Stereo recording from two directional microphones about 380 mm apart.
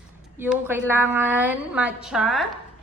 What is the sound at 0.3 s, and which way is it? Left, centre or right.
A woman's voice, centre.